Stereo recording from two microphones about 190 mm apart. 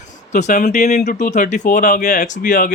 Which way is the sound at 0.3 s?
40° left (ahead or behind).